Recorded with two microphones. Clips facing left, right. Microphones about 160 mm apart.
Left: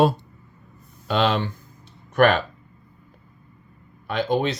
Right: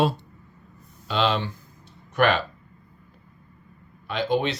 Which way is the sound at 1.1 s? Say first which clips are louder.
Left 2 dB; 50° left (ahead or behind).